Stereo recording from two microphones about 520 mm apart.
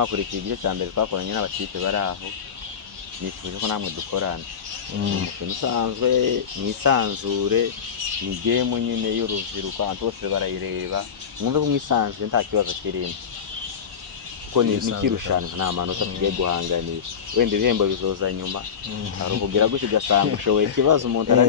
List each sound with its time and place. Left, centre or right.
0.0 s speech: right
3.6 s speech: right
5.6 s speech: right
14.5 s speech: right